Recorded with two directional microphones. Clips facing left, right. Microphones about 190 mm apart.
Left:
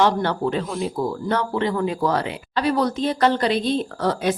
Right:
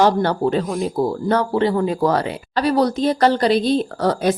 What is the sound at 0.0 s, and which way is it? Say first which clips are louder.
Speech: right 3 dB; 40° right (ahead or behind).